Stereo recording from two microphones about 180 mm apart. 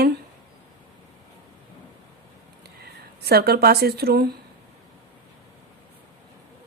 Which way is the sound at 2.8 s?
60° right (ahead or behind).